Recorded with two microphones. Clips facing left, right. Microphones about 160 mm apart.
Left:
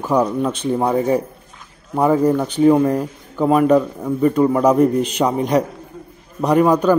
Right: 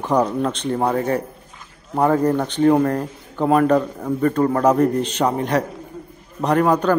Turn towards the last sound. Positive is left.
turn(degrees=10)  # may be behind; listen again after turning